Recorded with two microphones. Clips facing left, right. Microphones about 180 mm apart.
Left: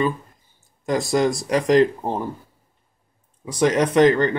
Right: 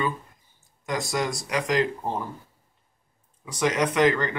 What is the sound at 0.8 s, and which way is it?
Speech, 30° left (ahead or behind).